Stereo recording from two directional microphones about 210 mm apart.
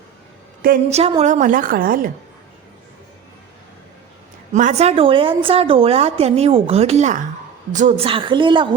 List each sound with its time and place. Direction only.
0.9 s a woman's voice: 30° right (ahead or behind)
4.5 s a woman's voice: 35° right (ahead or behind)